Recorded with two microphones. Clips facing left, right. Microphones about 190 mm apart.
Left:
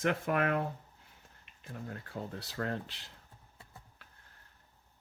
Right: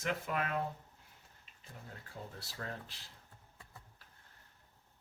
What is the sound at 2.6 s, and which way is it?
Speech, 70° left (ahead or behind).